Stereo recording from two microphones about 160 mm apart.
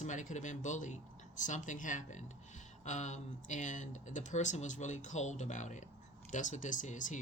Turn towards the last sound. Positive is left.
turn(degrees=50)  # may be behind; listen again after turning